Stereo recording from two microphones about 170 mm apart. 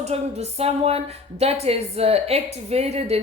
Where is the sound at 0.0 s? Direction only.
40° right (ahead or behind).